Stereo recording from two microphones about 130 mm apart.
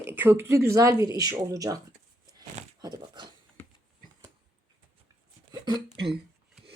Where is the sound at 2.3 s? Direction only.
30° right (ahead or behind).